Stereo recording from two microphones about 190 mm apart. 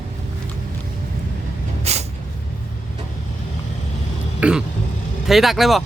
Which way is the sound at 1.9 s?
35° right (ahead or behind).